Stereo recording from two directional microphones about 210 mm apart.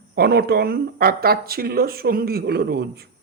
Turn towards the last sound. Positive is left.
turn(degrees=-50)  # may be behind; listen again after turning